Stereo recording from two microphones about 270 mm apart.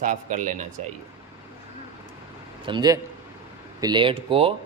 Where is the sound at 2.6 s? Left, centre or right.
Centre.